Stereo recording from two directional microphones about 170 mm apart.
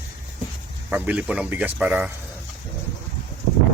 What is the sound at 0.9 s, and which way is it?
Speech, 10° right (ahead or behind).